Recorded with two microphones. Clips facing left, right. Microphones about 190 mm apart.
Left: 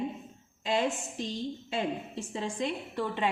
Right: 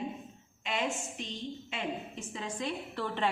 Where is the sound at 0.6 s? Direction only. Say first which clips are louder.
Left 5 dB; 35° left (ahead or behind).